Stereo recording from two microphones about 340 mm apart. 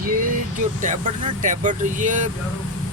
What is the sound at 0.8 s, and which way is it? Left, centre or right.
Speech, right.